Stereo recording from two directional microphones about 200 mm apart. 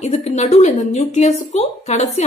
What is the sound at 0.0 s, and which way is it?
A woman's voice, 35° left (ahead or behind).